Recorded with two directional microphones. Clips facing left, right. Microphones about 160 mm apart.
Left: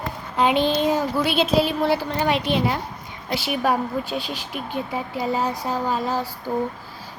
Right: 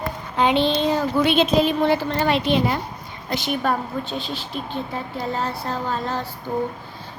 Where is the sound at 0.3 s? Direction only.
5° left (ahead or behind).